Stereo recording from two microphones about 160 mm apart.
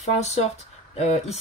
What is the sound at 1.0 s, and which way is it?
Speech, 45° left (ahead or behind).